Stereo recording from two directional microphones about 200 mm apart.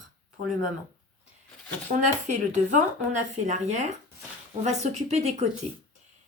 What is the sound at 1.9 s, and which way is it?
Speech, 35° right (ahead or behind).